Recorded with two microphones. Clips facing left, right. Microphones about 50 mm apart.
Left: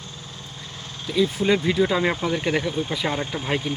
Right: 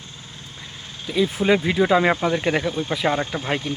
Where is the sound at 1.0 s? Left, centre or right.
Centre.